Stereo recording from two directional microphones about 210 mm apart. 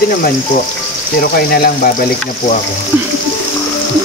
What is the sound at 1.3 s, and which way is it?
Speech, 45° left (ahead or behind).